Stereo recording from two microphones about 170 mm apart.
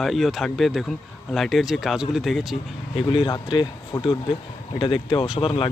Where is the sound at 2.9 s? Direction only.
30° left (ahead or behind).